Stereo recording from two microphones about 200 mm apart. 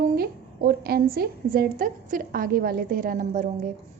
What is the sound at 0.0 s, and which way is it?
A woman's voice, 50° right (ahead or behind).